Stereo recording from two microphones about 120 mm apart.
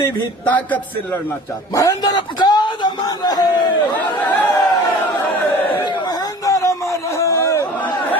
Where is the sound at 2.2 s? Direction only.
40° left (ahead or behind).